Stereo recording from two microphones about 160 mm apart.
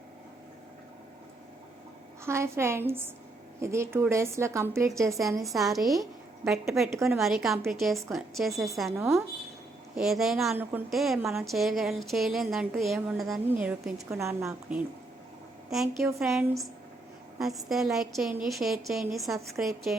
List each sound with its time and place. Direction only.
2.2 s a woman's voice: 15° right (ahead or behind)
5.5 s a woman's voice: centre (ahead or behind)
6.9 s a woman's voice: 15° right (ahead or behind)
7.2 s a woman's voice: centre (ahead or behind)
9.0 s a woman's voice: 15° right (ahead or behind)
9.9 s a woman's voice: centre (ahead or behind)
10.6 s a woman's voice: 10° right (ahead or behind)
10.9 s a woman's voice: centre (ahead or behind)